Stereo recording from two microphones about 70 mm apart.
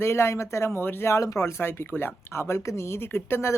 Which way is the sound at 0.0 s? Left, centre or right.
Left.